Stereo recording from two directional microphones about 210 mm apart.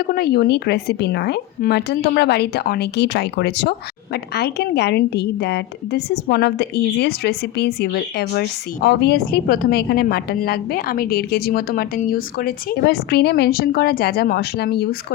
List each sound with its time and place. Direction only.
0.0 s speech: 50° left (ahead or behind)